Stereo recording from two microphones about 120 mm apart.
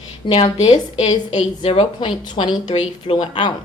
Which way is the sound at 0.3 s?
50° left (ahead or behind).